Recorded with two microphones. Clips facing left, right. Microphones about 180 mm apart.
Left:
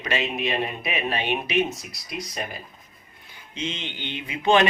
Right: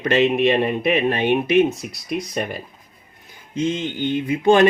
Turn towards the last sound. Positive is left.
turn(degrees=-45)  # may be behind; listen again after turning